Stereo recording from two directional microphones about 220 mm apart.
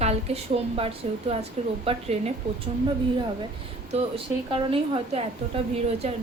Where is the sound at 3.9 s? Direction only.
25° right (ahead or behind).